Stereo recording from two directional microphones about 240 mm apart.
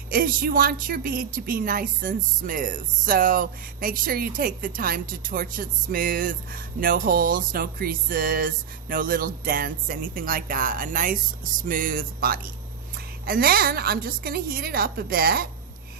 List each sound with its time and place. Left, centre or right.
0.1 s a woman's voice: right